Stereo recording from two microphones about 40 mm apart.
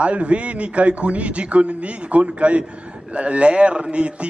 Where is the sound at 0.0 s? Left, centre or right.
Right.